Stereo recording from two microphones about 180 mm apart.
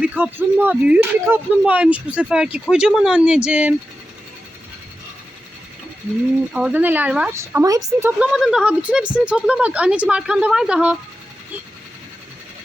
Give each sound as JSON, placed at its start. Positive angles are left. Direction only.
{"t": 0.0, "sound": "speech", "side_deg": -10}
{"t": 6.5, "sound": "speech", "side_deg": -5}
{"t": 8.2, "sound": "speech", "side_deg": -5}